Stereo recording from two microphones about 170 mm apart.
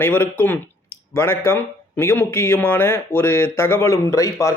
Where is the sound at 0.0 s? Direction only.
10° left (ahead or behind).